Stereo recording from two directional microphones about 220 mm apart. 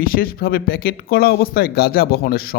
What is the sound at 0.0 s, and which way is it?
A man's voice, 40° left (ahead or behind).